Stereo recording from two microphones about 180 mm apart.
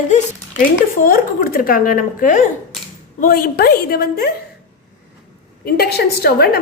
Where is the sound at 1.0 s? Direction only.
50° left (ahead or behind).